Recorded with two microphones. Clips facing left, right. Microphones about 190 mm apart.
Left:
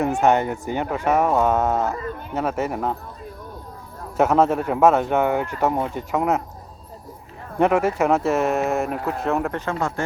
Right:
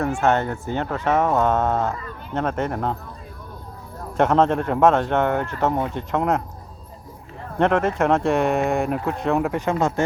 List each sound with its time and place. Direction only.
0.0 s speech: 15° left (ahead or behind)
4.2 s speech: 5° left (ahead or behind)
7.6 s speech: 10° left (ahead or behind)
9.6 s speech: 20° right (ahead or behind)